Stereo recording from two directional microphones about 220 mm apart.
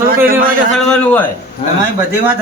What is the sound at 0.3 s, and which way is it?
Speech, 40° right (ahead or behind).